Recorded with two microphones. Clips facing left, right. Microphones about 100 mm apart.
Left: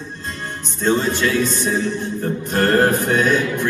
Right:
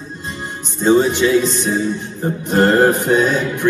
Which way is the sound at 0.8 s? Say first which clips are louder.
Right 5 dB; 15° right (ahead or behind).